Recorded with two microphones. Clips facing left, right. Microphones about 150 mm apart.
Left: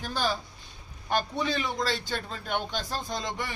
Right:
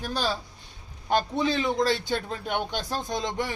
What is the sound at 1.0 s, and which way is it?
A man's voice, 20° right (ahead or behind).